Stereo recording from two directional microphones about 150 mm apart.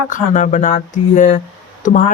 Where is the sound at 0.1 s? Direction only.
55° left (ahead or behind).